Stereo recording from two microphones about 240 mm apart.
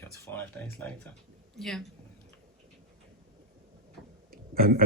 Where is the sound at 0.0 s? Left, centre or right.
Centre.